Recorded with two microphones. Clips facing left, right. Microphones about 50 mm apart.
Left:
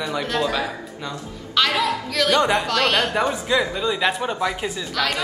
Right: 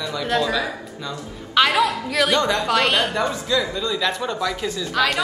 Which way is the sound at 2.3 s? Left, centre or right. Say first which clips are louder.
Left 4 dB; left.